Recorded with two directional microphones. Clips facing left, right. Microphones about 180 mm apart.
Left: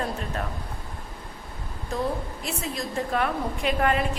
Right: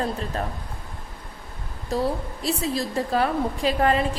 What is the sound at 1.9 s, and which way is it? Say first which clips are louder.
A woman's voice: right 3 dB; 35° right (ahead or behind).